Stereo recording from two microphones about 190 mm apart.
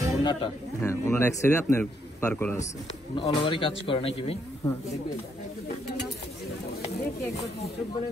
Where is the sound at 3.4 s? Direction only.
25° left (ahead or behind).